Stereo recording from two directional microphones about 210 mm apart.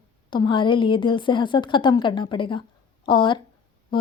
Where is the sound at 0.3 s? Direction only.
20° left (ahead or behind).